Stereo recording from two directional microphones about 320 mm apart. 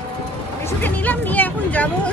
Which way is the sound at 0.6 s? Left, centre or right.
Centre.